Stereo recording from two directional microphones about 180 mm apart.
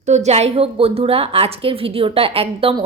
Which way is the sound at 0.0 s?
40° right (ahead or behind).